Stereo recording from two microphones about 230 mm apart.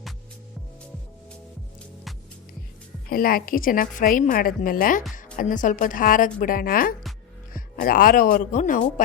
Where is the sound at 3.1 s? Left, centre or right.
Left.